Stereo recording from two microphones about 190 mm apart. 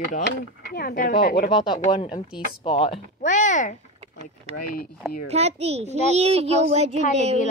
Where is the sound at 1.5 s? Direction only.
25° left (ahead or behind).